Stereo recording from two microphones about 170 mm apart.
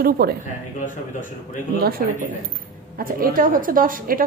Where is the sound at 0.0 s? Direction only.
65° right (ahead or behind).